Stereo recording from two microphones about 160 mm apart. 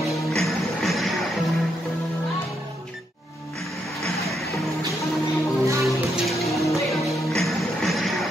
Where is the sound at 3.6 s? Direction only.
Centre (ahead or behind).